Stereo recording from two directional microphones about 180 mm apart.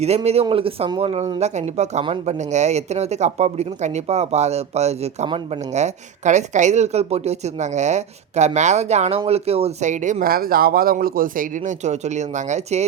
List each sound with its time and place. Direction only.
0.0 s speech: 35° right (ahead or behind)